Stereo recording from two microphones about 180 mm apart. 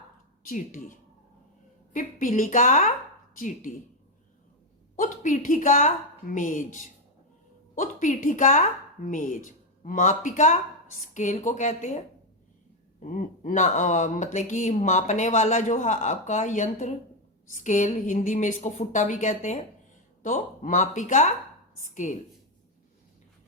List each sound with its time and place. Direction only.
0.4 s speech: 45° left (ahead or behind)
4.9 s speech: 45° left (ahead or behind)
13.0 s speech: 45° left (ahead or behind)